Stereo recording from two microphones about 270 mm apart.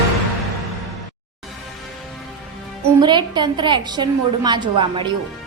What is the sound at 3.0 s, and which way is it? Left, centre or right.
A woman's voice, centre.